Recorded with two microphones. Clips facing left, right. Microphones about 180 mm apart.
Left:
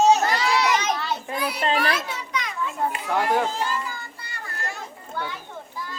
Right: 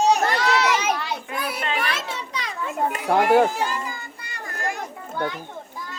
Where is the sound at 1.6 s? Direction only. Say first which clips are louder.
Left 5 dB; 30° left (ahead or behind).